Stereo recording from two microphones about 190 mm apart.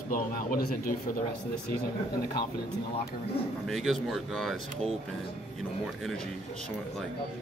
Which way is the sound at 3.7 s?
Centre (ahead or behind).